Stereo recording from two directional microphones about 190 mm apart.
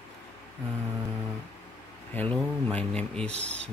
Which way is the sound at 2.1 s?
10° left (ahead or behind).